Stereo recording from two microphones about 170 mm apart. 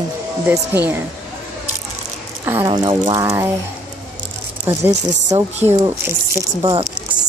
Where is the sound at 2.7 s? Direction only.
25° right (ahead or behind).